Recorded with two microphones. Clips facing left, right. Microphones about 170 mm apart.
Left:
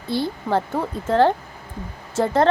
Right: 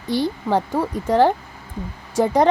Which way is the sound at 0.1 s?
15° right (ahead or behind).